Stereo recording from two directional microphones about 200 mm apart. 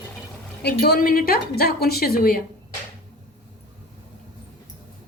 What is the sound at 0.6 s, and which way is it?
A woman's voice, 55° left (ahead or behind).